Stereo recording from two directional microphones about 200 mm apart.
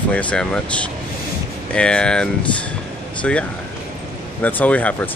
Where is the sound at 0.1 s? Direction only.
5° left (ahead or behind).